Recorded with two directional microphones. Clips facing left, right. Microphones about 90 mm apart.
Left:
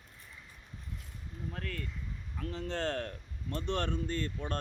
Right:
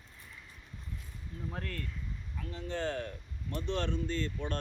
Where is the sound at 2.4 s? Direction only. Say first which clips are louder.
Left 1 dB; 90° left; by 3.1 s 75° left (ahead or behind).